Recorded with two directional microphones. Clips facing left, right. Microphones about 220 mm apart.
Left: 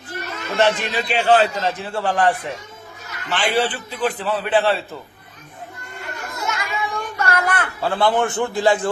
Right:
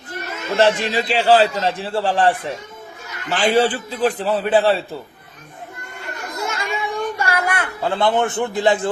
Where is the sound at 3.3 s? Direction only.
40° right (ahead or behind).